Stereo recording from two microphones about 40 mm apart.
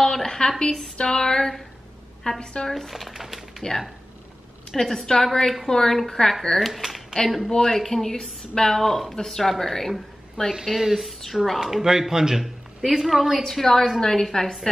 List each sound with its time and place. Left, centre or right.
0.0 s a woman's voice: centre
2.7 s speech: centre
4.8 s speech: centre
6.6 s speech: centre
10.6 s speech: centre
11.6 s speech: centre
13.4 s speech: centre